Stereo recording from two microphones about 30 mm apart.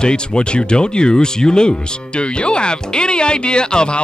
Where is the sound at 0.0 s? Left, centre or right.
Left.